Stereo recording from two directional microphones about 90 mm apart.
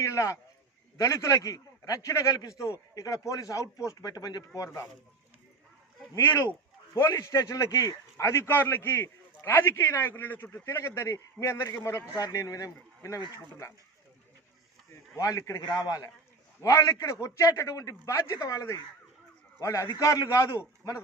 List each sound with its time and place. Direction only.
0.0 s speech: 35° left (ahead or behind)
6.1 s a man's voice: 30° left (ahead or behind)
12.1 s speech: 45° left (ahead or behind)
15.1 s speech: 35° left (ahead or behind)
15.6 s a man's voice: 45° left (ahead or behind); by 20.7 s 30° left (ahead or behind)